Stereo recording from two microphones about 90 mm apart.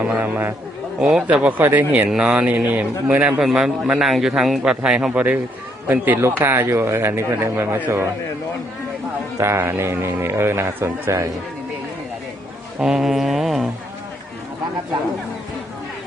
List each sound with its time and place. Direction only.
0.0 s a man's voice: 15° right (ahead or behind)
9.4 s a man's voice: 30° right (ahead or behind)
12.8 s mantra: 5° right (ahead or behind)